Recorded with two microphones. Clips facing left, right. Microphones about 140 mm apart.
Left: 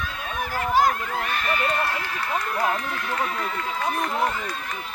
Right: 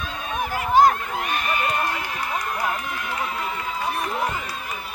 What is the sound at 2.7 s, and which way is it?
Run, 15° right (ahead or behind).